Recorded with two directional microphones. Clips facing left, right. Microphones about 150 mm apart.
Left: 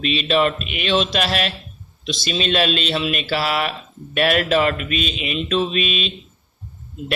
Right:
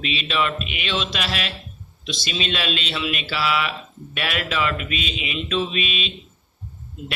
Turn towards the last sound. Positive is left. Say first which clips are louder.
# left 4 dB
turn(degrees=45)  # may be behind; listen again after turning